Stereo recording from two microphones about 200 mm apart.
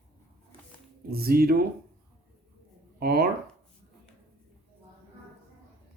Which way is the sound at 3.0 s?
50° right (ahead or behind).